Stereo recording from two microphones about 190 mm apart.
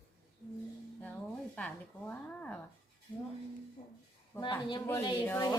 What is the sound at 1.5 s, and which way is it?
A woman's voice, 5° left (ahead or behind).